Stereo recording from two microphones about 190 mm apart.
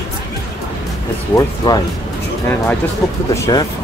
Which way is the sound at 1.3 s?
15° left (ahead or behind).